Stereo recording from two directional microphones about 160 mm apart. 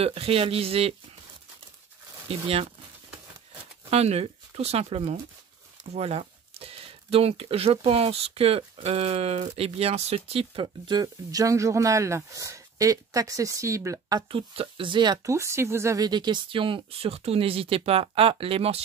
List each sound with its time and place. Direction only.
0.0 s speech: 35° right (ahead or behind)
2.2 s speech: 40° right (ahead or behind)
3.9 s speech: 40° right (ahead or behind); by 14.2 s 20° right (ahead or behind)
14.3 s speech: 35° right (ahead or behind)